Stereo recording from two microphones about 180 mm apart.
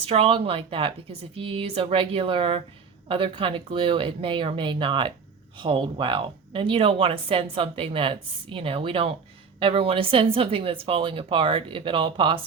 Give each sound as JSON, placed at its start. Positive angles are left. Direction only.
{"t": 0.0, "sound": "speech", "side_deg": -30}